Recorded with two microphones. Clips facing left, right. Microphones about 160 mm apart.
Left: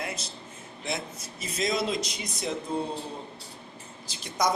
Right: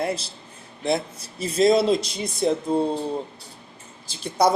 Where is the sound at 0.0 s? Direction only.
30° right (ahead or behind).